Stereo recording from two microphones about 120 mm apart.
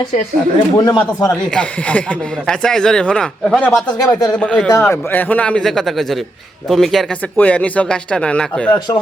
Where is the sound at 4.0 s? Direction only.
35° left (ahead or behind).